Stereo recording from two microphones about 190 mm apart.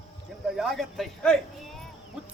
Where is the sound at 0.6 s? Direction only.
Centre (ahead or behind).